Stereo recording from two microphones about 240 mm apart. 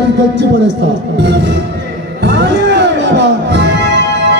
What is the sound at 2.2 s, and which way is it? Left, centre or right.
Music, right.